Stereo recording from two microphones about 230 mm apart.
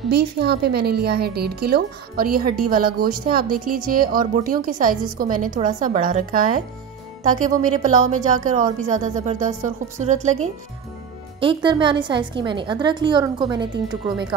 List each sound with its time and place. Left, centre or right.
0.1 s a woman's voice: right; by 14.2 s centre